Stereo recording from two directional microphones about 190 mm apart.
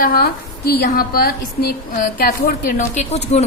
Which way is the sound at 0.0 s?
50° left (ahead or behind).